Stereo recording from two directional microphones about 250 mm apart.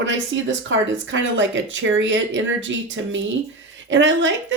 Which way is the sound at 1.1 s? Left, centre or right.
Right.